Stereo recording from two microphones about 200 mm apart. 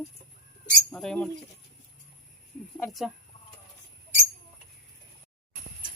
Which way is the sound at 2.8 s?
Centre (ahead or behind).